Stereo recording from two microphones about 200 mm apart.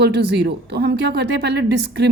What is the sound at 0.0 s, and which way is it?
A woman's voice, 55° right (ahead or behind).